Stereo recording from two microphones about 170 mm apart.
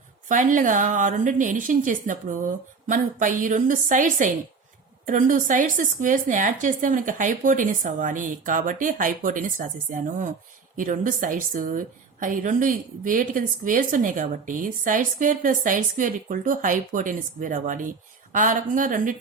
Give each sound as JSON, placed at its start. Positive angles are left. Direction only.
{"t": 0.3, "sound": "a woman's voice", "side_deg": -50}